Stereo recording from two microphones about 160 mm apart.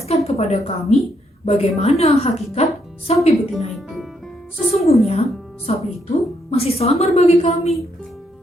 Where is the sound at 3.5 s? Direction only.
Centre (ahead or behind).